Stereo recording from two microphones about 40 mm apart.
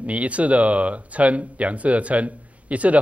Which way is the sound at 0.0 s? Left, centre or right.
Right.